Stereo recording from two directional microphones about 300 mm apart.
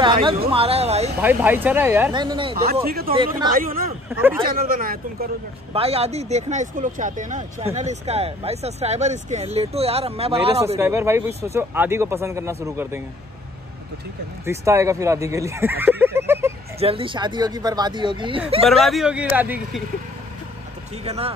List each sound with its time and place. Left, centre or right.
0.0 s a sound: centre
0.5 s speech: centre
1.2 s speech: centre
2.5 s speech: right
3.1 s speech: centre
3.5 s speech: right
4.1 s speech: centre
4.5 s speech: right
10.8 s speech: centre
14.4 s speech: centre
15.8 s a sound: centre
16.8 s speech: centre
18.7 s speech: centre
21.0 s speech: centre